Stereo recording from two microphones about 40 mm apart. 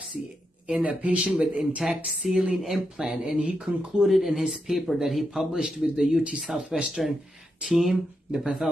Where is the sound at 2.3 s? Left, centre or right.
Centre.